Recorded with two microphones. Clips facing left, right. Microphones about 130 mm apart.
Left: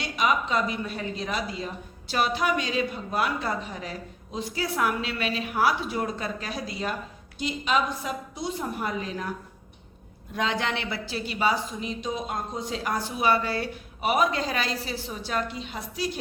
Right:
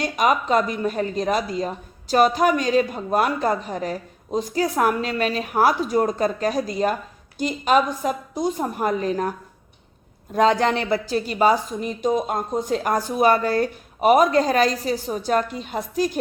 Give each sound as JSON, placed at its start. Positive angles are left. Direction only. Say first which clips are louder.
{"t": 0.0, "sound": "a woman's voice", "louder": "right 5 dB", "side_deg": -45}
{"t": 10.3, "sound": "a woman's voice", "louder": "right 10 dB", "side_deg": -40}